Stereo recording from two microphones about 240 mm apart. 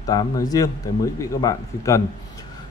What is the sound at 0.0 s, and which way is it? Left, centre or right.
Speech, centre.